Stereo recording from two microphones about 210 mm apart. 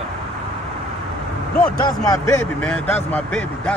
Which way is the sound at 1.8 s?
15° left (ahead or behind).